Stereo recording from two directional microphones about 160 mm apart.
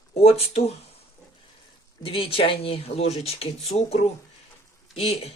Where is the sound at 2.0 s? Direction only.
35° left (ahead or behind).